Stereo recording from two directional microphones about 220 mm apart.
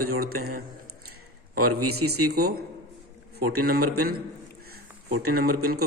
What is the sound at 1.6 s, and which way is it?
Speech, 90° right.